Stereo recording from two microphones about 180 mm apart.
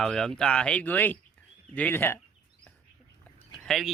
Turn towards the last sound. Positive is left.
turn(degrees=0)  # may be behind; listen again after turning